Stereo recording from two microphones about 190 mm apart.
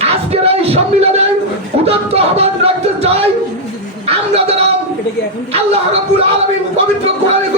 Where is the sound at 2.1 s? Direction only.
30° right (ahead or behind).